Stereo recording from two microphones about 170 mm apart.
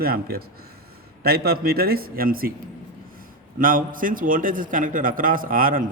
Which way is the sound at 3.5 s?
55° right (ahead or behind).